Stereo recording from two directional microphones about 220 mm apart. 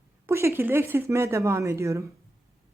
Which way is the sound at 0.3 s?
10° right (ahead or behind).